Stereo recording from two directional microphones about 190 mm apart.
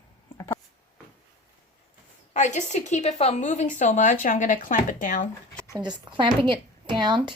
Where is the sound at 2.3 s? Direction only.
40° left (ahead or behind).